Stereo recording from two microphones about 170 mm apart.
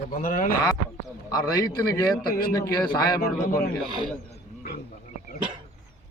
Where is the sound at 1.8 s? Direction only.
60° left (ahead or behind).